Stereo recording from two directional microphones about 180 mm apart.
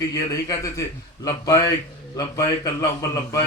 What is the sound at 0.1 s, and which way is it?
A man's voice, 20° left (ahead or behind).